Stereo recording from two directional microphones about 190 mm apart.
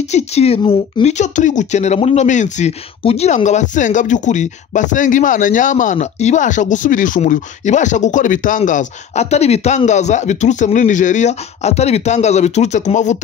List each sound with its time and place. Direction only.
0.1 s speech: 35° left (ahead or behind)